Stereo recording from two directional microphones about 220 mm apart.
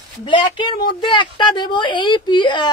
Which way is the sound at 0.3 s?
20° left (ahead or behind).